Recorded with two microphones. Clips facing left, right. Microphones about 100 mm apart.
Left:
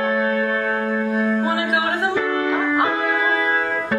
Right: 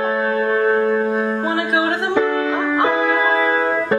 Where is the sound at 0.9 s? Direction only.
35° right (ahead or behind).